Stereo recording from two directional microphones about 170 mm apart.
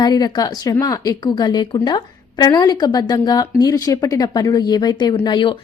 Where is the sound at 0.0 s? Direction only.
25° left (ahead or behind).